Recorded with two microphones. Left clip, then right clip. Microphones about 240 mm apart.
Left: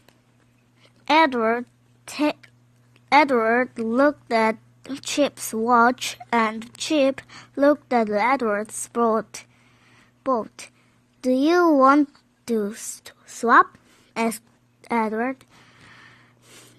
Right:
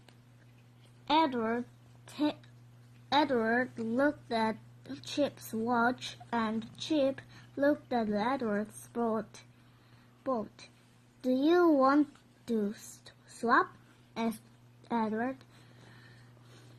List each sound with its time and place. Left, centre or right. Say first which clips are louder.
1.0 s a woman's voice: left 11 dB; left